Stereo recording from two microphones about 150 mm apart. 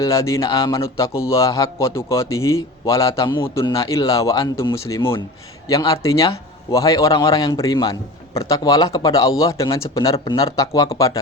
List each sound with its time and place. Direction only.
0.0 s speech: 20° left (ahead or behind)